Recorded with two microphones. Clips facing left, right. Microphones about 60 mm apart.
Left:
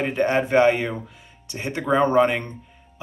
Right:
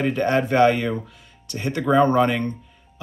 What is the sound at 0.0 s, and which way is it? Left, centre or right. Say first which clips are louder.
Speech: right 1 dB; centre.